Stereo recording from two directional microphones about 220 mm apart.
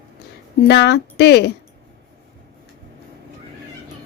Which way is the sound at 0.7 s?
50° left (ahead or behind).